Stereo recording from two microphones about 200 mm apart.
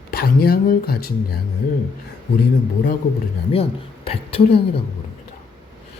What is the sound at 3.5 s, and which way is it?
Speech, 30° left (ahead or behind).